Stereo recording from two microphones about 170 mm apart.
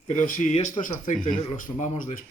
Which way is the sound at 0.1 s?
45° left (ahead or behind).